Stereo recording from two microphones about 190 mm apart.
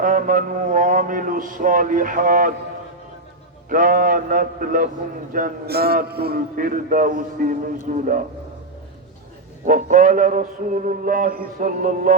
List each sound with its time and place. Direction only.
0.0 s mantra: 45° right (ahead or behind)
3.7 s mantra: 45° right (ahead or behind)
9.6 s mantra: 45° right (ahead or behind)